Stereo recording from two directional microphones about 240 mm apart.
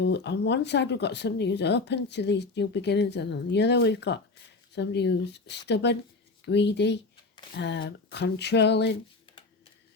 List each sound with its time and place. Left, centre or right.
0.0 s speech: left